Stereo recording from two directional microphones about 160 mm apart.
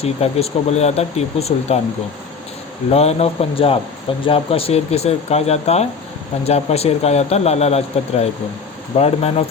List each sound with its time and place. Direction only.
0.0 s speech: 40° left (ahead or behind)
2.9 s speech: 40° left (ahead or behind)